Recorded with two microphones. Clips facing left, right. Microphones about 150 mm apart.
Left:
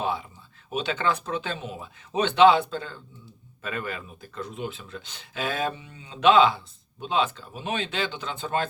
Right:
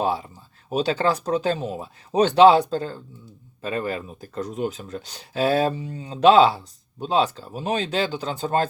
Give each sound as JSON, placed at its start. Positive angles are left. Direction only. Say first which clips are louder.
{"t": 0.0, "sound": "speech", "louder": "right 5 dB", "side_deg": -40}